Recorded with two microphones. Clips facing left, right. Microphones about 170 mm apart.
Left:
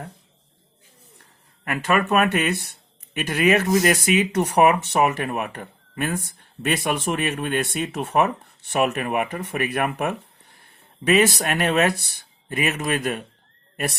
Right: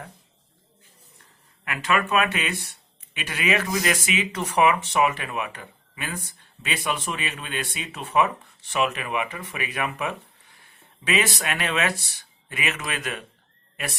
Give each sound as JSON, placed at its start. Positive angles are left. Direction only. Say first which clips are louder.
{"t": 1.6, "sound": "speech", "louder": "left 3 dB", "side_deg": 45}
{"t": 3.2, "sound": "speech", "louder": "left 7 dB", "side_deg": 40}
{"t": 11.0, "sound": "speech", "louder": "left 7 dB", "side_deg": 45}